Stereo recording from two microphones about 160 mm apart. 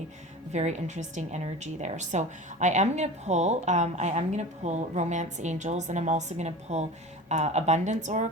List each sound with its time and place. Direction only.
0.5 s a woman's voice: 45° right (ahead or behind)